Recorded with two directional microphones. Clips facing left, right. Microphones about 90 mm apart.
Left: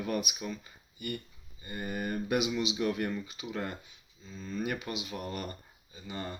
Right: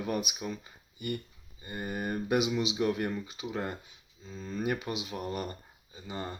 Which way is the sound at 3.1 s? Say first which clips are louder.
Right 1 dB; 20° right (ahead or behind).